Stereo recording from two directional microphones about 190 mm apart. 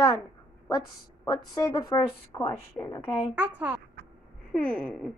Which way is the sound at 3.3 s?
10° right (ahead or behind).